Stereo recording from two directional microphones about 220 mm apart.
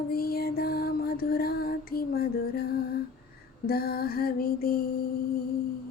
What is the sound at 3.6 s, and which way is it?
Lullaby, 45° left (ahead or behind).